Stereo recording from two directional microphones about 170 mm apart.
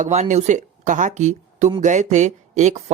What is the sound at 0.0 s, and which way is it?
Speech, 45° right (ahead or behind).